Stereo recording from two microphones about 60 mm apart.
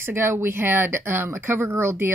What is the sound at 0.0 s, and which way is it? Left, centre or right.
Speech, right.